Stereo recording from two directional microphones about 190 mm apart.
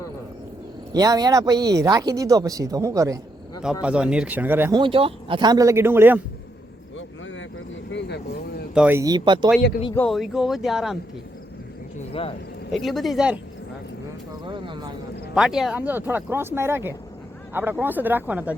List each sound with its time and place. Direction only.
0.9 s speech: 20° right (ahead or behind)
3.6 s speech: 5° right (ahead or behind)
4.7 s speech: 25° right (ahead or behind); by 6.1 s 10° right (ahead or behind)
7.9 s vehicle: 60° left (ahead or behind)
8.7 s speech: 10° right (ahead or behind)
10.1 s speech: centre (ahead or behind)
12.7 s speech: centre (ahead or behind)
14.4 s speech: 25° right (ahead or behind)
15.4 s speech: 5° right (ahead or behind)